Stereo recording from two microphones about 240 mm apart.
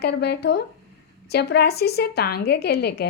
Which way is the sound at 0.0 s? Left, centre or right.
Left.